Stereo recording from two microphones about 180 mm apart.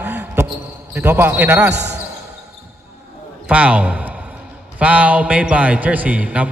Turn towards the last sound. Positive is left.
turn(degrees=-5)  # may be behind; listen again after turning